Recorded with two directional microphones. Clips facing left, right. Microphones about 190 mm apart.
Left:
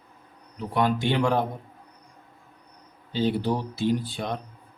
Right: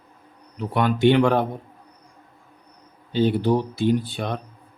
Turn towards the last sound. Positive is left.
turn(degrees=-65)  # may be behind; listen again after turning